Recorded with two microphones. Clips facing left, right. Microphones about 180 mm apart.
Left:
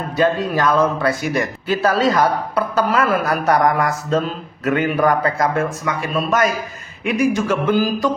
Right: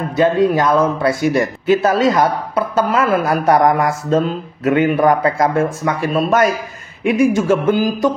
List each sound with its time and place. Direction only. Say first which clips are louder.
0.1 s speech: right 4 dB; 25° right (ahead or behind)